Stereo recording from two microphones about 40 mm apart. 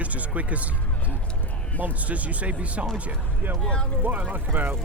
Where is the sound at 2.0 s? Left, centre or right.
Right.